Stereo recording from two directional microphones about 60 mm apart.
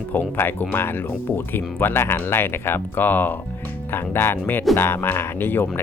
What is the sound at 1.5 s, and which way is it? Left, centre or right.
Speech, left.